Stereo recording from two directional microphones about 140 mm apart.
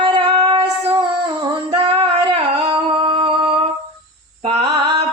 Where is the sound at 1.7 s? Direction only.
40° right (ahead or behind).